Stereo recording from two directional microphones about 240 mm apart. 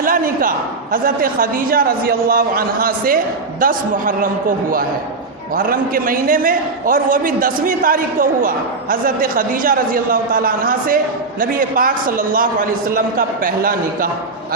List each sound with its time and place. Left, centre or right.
0.0 s a man's voice: right